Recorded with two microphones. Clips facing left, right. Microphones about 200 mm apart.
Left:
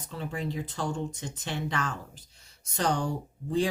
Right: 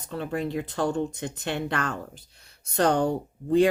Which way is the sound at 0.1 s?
60° right (ahead or behind).